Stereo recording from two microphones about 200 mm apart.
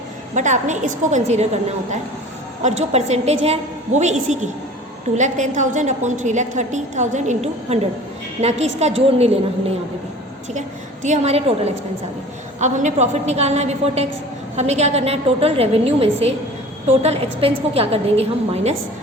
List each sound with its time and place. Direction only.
0.3 s a woman's voice: 40° right (ahead or behind)
11.0 s a woman's voice: 35° right (ahead or behind)